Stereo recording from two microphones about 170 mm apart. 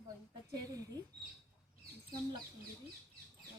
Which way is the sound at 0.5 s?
20° right (ahead or behind).